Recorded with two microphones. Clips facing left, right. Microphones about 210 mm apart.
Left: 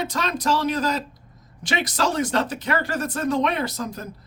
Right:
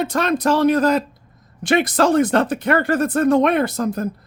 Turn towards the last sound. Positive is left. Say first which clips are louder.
# right 8 dB
turn(degrees=-50)  # may be behind; listen again after turning